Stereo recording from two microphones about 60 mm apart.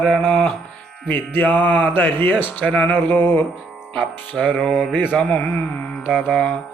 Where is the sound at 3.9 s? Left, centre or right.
Left.